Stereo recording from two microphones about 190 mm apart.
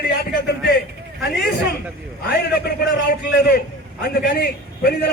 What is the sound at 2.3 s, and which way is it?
A man's voice, 55° left (ahead or behind).